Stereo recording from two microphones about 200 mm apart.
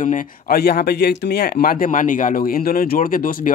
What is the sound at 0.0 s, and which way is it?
Speech, 45° left (ahead or behind).